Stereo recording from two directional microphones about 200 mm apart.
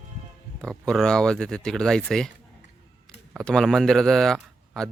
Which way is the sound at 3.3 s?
5° left (ahead or behind).